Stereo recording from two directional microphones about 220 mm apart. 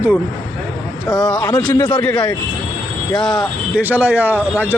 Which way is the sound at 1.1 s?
15° left (ahead or behind).